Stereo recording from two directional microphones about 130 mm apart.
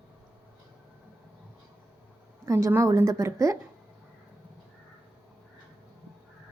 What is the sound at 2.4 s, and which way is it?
A woman's voice, 20° right (ahead or behind).